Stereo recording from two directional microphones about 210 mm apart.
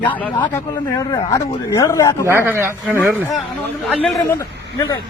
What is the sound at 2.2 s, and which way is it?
Speech, 10° right (ahead or behind).